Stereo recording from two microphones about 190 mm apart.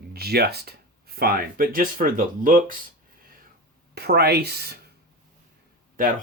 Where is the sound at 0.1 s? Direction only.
55° right (ahead or behind).